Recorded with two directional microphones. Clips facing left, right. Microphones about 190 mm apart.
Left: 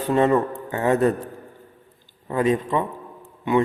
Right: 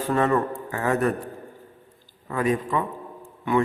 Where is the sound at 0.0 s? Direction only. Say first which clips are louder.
Left 3 dB; 20° left (ahead or behind).